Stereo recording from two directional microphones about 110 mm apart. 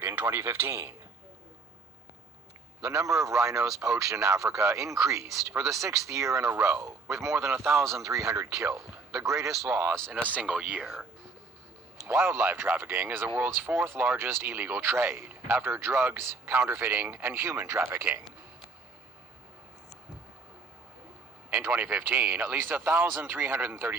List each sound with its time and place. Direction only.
0.0 s speech: 20° right (ahead or behind)
2.8 s speech: 30° right (ahead or behind)
9.6 s speech: 15° right (ahead or behind)
12.0 s speech: 25° right (ahead or behind)
21.5 s speech: 20° right (ahead or behind)